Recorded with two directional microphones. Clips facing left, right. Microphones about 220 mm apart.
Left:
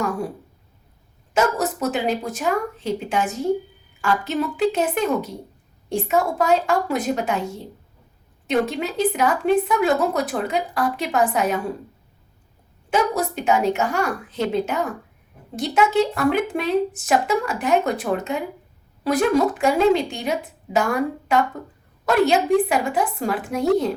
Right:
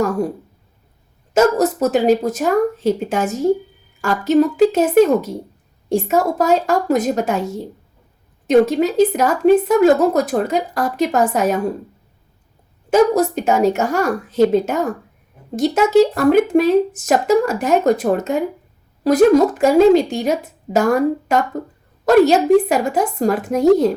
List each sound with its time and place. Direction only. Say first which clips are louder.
1.3 s speech: right 7 dB; 40° right (ahead or behind)
12.9 s speech: right 8 dB; 45° right (ahead or behind)